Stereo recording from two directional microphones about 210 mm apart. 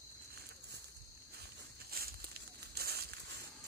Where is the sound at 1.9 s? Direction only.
45° right (ahead or behind).